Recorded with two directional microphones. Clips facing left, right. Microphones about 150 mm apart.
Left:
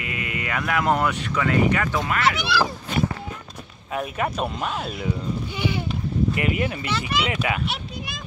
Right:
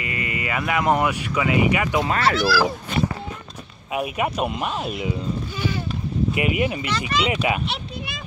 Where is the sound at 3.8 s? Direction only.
10° right (ahead or behind).